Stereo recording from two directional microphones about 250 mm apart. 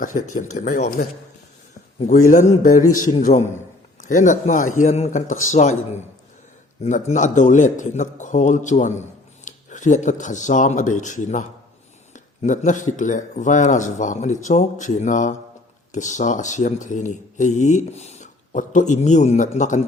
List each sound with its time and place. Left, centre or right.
0.5 s speech: left
2.0 s speech: left
6.8 s speech: left